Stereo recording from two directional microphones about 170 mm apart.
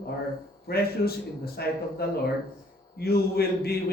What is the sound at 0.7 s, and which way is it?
Speech, 65° left (ahead or behind).